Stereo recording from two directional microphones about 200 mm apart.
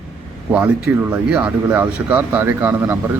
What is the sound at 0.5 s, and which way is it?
A man's voice, 5° right (ahead or behind).